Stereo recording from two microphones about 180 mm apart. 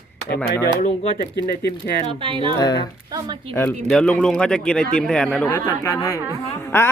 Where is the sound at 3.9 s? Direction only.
5° left (ahead or behind).